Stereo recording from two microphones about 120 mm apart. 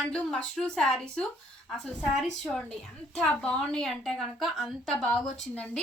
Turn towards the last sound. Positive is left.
turn(degrees=5)  # may be behind; listen again after turning